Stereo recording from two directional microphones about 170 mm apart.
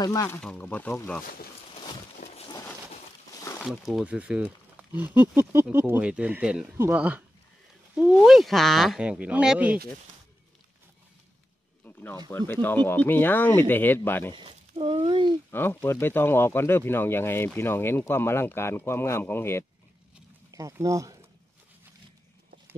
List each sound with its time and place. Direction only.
0.0 s speech: 20° left (ahead or behind)
0.4 s speech: 5° left (ahead or behind)
1.2 s speech: 60° left (ahead or behind)
2.1 s a sound: 35° left (ahead or behind)
3.3 s a sound: 15° left (ahead or behind)
3.6 s speech: 5° right (ahead or behind)
11.8 s a sound: 10° left (ahead or behind)
12.3 s speech: 15° left (ahead or behind)
14.3 s speech: 30° right (ahead or behind)
15.5 s speech: 15° left (ahead or behind)
20.5 s speech: 20° right (ahead or behind)